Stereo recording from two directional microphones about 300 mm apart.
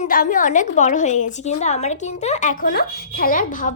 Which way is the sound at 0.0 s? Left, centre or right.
Left.